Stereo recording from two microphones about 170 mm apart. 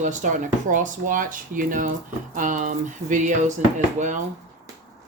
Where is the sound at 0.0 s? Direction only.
45° right (ahead or behind).